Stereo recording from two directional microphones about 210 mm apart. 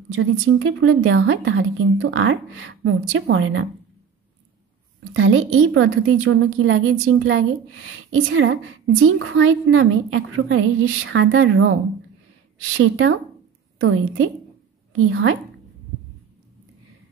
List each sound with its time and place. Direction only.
0.1 s a woman's voice: 70° right (ahead or behind)
5.1 s a woman's voice: 70° right (ahead or behind)
12.7 s a woman's voice: 70° right (ahead or behind)